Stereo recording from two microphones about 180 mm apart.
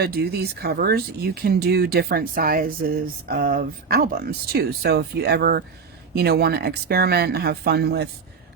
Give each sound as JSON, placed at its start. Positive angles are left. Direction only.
{"t": 0.0, "sound": "speech", "side_deg": -60}